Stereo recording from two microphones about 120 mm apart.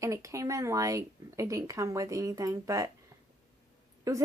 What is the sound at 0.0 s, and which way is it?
A woman's voice, 25° right (ahead or behind).